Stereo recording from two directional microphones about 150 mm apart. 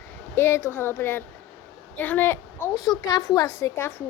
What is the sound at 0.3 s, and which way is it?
Speech, 15° left (ahead or behind).